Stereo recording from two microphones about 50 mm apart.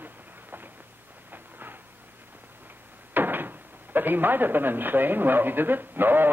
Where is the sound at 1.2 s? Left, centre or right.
Right.